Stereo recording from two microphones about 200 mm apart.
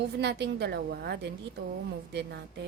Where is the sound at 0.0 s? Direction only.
55° right (ahead or behind).